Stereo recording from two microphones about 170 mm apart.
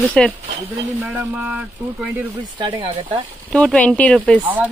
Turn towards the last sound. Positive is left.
turn(degrees=10)  # may be behind; listen again after turning